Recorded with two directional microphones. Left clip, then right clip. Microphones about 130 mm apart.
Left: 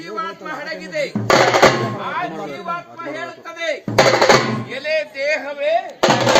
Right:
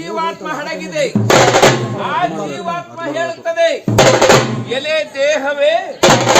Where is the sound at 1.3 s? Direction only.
40° left (ahead or behind).